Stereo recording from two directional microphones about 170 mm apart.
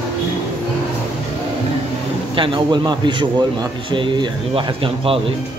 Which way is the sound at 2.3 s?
30° right (ahead or behind).